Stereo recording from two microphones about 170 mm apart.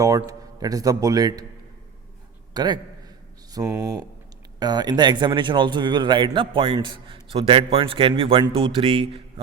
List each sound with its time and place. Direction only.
0.0 s speech: 20° right (ahead or behind)
2.5 s a man's voice: 25° right (ahead or behind)